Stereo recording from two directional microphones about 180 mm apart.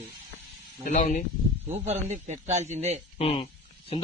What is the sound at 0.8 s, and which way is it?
Speech, 45° left (ahead or behind).